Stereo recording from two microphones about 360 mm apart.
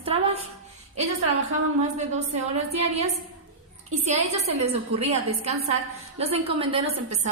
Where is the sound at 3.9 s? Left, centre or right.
Centre.